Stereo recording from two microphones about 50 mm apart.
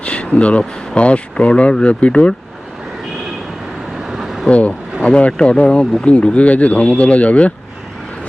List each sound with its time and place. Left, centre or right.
0.0 s a sound: left
0.9 s speech: left
3.9 s vehicle: centre
4.4 s speech: left
5.8 s speech: centre
6.1 s speech: left